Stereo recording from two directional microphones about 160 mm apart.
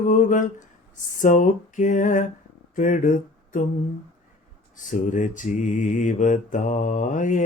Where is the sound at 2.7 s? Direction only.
55° left (ahead or behind).